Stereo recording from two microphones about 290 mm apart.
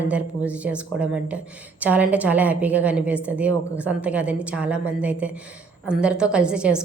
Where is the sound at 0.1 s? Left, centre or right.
Centre.